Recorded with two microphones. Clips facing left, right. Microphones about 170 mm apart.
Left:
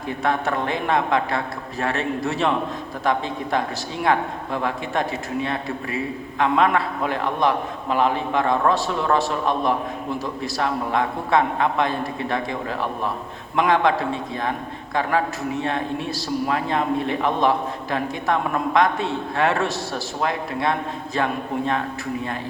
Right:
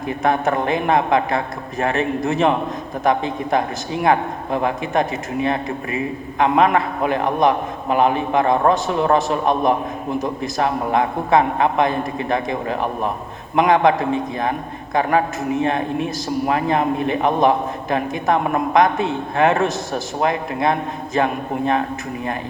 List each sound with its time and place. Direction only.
0.2 s a man's voice: 20° right (ahead or behind)